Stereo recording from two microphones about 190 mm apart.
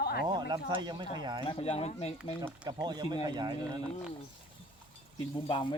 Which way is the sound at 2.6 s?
20° right (ahead or behind).